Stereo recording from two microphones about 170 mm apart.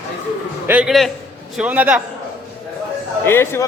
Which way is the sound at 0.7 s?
5° right (ahead or behind).